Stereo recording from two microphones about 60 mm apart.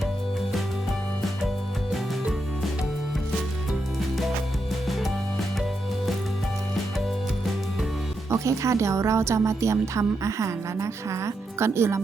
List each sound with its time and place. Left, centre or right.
4.9 s music: centre
8.3 s speech: right